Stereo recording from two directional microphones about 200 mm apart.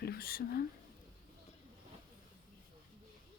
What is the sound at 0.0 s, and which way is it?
Speech, 50° left (ahead or behind).